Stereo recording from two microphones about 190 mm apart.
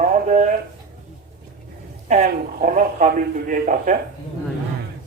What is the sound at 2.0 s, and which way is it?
A man's voice, 40° right (ahead or behind).